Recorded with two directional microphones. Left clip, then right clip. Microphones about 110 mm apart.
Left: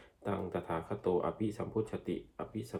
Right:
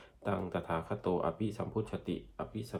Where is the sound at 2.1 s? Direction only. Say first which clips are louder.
Even; 30° right (ahead or behind).